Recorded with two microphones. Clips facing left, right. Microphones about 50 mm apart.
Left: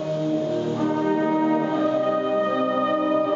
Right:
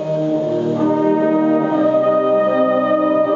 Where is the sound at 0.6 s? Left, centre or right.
Centre.